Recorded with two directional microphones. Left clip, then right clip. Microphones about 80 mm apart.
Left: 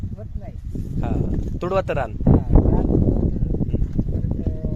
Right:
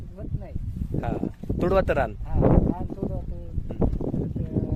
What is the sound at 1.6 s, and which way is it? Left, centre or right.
Speech, right.